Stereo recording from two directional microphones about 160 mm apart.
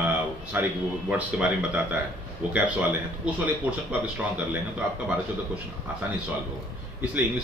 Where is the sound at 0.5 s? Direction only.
10° right (ahead or behind).